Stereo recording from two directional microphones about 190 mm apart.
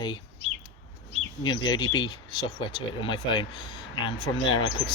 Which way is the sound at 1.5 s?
20° left (ahead or behind).